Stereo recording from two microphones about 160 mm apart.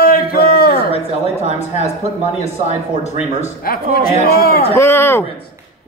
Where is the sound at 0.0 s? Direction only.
65° left (ahead or behind).